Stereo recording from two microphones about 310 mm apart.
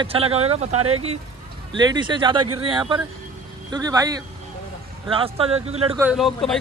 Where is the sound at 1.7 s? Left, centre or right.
Centre.